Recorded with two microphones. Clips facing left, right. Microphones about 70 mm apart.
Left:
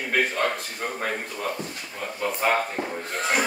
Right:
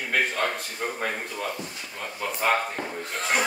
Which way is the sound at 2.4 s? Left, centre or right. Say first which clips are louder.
Even; centre.